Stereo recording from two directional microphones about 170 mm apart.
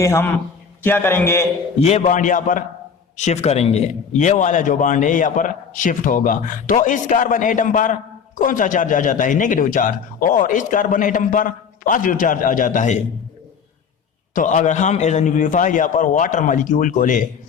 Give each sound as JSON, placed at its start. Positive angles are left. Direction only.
{"t": 0.0, "sound": "a man's voice", "side_deg": 15}
{"t": 1.8, "sound": "a man's voice", "side_deg": 40}
{"t": 14.3, "sound": "a man's voice", "side_deg": 50}